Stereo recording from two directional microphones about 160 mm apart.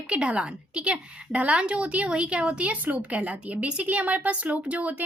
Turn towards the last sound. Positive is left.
turn(degrees=-10)  # may be behind; listen again after turning